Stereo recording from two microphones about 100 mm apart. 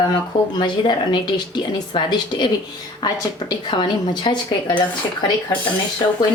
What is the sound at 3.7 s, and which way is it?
A woman's voice, 55° left (ahead or behind).